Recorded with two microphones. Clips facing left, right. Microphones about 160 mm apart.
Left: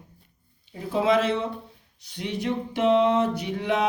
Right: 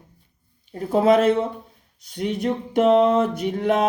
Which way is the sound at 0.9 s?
45° right (ahead or behind).